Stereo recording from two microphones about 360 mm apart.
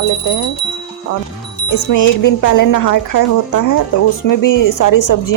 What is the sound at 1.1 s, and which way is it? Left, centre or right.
Speech, left.